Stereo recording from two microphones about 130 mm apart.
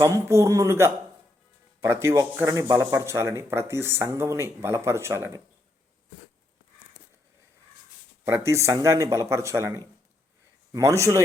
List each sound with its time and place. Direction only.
0.0 s speech: 20° right (ahead or behind)
8.2 s speech: 20° right (ahead or behind)